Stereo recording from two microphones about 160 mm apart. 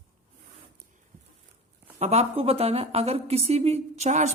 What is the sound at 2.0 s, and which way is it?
A woman's voice, 40° right (ahead or behind).